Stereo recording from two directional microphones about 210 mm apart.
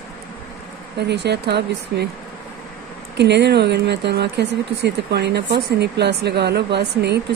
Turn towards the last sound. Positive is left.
turn(degrees=-50)  # may be behind; listen again after turning